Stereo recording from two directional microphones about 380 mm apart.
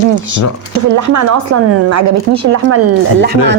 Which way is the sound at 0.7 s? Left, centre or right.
Right.